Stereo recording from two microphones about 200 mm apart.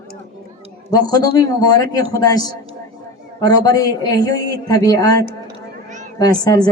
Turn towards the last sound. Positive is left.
turn(degrees=20)  # may be behind; listen again after turning